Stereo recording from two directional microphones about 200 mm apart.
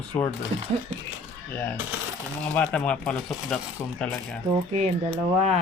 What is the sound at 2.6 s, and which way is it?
Speech, 5° left (ahead or behind).